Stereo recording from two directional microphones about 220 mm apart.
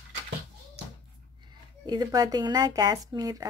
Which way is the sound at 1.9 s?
20° right (ahead or behind).